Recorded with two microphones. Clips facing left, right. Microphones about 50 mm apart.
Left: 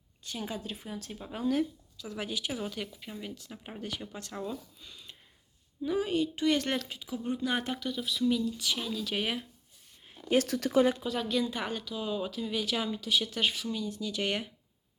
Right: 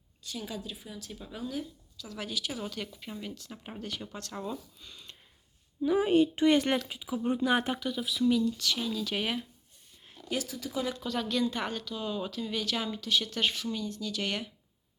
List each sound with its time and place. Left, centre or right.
0.2 s a woman's voice: left
1.4 s speech: left
2.0 s speech: left; by 5.1 s centre
6.0 s a woman's voice: right
6.6 s speech: centre
10.3 s speech: left
11.0 s speech: centre